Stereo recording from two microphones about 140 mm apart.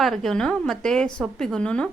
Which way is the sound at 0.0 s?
Centre (ahead or behind).